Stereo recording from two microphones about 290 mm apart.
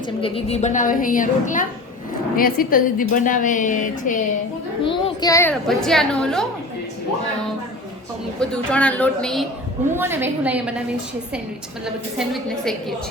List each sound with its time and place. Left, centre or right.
0.2 s a woman's voice: left; by 6.4 s centre
8.4 s a child's voice: centre
12.1 s a child's voice: centre